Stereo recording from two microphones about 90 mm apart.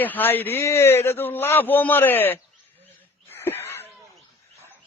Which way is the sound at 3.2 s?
25° left (ahead or behind).